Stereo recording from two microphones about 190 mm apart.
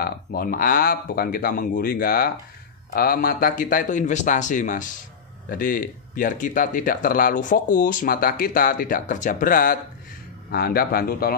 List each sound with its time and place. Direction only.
0.0 s speech: 55° left (ahead or behind)